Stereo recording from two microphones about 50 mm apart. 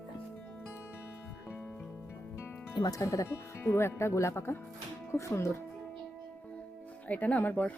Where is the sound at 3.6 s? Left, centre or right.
Left.